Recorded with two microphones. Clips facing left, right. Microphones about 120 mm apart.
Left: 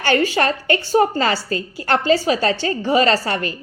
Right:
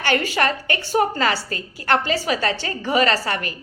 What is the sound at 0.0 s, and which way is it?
A woman's voice, 30° left (ahead or behind).